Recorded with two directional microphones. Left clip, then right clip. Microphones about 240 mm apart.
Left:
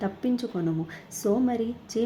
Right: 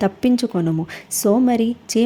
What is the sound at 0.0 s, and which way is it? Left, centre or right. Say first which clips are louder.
A woman's voice: right 10 dB; right.